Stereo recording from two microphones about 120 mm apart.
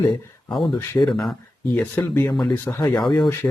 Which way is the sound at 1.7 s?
15° left (ahead or behind).